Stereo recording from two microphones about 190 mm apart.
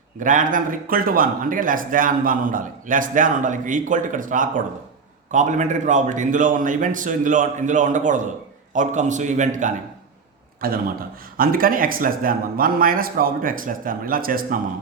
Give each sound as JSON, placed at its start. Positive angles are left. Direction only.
{"t": 0.2, "sound": "a man's voice", "side_deg": -45}